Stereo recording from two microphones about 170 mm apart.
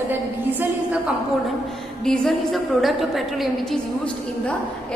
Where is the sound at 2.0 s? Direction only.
5° left (ahead or behind).